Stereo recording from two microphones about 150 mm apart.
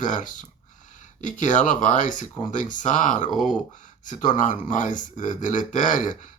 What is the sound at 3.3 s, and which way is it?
Speech, centre (ahead or behind).